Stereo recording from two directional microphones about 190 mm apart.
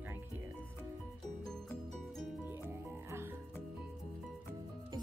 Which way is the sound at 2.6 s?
15° right (ahead or behind).